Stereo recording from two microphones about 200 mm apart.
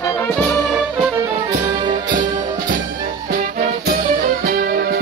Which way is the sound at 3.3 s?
50° right (ahead or behind).